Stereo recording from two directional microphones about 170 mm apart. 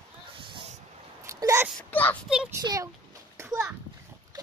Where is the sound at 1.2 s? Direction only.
15° right (ahead or behind).